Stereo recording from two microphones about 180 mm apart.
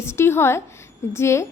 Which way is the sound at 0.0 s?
15° left (ahead or behind).